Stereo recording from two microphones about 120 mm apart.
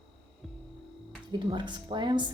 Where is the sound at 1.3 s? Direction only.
40° right (ahead or behind).